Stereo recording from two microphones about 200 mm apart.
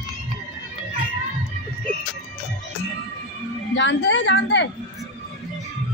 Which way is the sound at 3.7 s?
65° left (ahead or behind).